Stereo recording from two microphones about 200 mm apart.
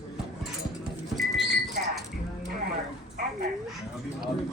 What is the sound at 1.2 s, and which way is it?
Horse, centre (ahead or behind).